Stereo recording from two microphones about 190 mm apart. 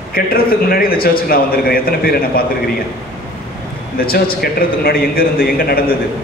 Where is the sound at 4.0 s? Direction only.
50° left (ahead or behind).